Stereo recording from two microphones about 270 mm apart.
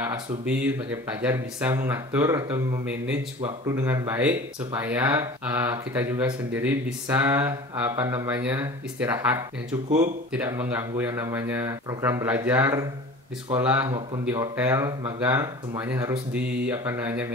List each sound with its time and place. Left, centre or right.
0.0 s speech: centre
9.8 s speech: right
10.3 s speech: centre